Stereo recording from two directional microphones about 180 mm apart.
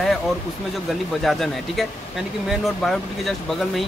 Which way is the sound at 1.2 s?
Centre (ahead or behind).